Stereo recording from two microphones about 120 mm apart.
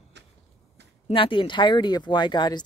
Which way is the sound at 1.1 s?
45° left (ahead or behind).